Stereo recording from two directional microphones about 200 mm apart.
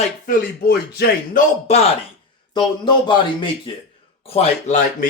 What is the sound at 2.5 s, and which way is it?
A man's voice, 25° left (ahead or behind).